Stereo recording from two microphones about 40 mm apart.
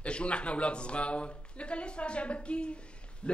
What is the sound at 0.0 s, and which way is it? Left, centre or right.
A man's voice, left.